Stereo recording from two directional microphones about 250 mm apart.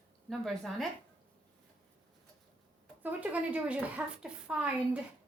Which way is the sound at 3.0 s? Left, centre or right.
Centre.